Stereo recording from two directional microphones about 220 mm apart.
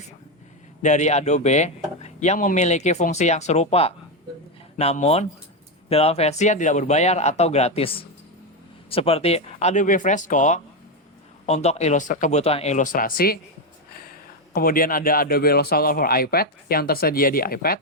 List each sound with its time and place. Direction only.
0.8 s speech: 35° left (ahead or behind)
14.5 s speech: 40° left (ahead or behind)